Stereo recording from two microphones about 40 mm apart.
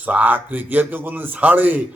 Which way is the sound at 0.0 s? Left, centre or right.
Right.